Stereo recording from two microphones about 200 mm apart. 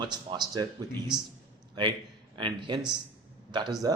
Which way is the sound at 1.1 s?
5° right (ahead or behind).